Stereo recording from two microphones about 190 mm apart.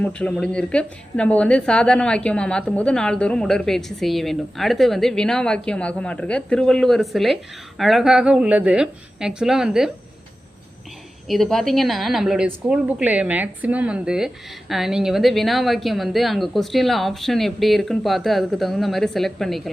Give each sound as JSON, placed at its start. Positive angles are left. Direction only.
{"t": 0.0, "sound": "a woman's voice", "side_deg": 5}
{"t": 11.3, "sound": "a woman's voice", "side_deg": 0}